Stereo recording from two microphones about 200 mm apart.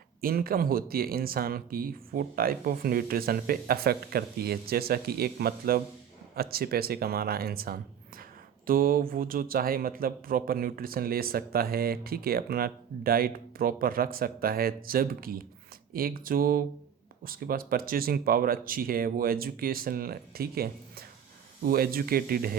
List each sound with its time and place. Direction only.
0.2 s speech: 45° right (ahead or behind)